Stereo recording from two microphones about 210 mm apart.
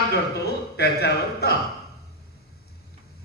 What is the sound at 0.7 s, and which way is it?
Speech, 50° left (ahead or behind).